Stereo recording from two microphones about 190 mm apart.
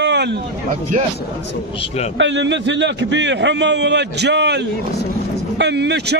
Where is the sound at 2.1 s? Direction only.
70° right (ahead or behind).